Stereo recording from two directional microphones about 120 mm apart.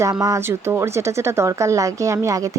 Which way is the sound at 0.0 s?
30° right (ahead or behind).